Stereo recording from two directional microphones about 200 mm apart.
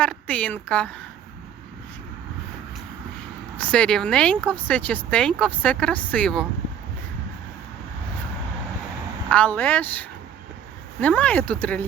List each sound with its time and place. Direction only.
0.0 s speech: 5° left (ahead or behind)
3.6 s speech: 5° left (ahead or behind)
9.3 s speech: 10° left (ahead or behind)